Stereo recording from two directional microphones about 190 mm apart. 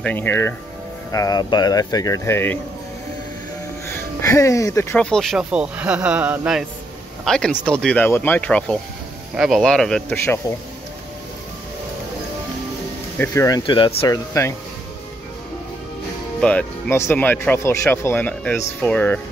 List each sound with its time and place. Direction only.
0.0 s speech: 10° left (ahead or behind)
3.8 s speech: 15° left (ahead or behind)
5.1 s speech: centre (ahead or behind)
13.2 s speech: 15° left (ahead or behind)
16.3 s speech: 5° left (ahead or behind)